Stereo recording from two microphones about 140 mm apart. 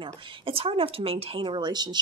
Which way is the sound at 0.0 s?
40° right (ahead or behind).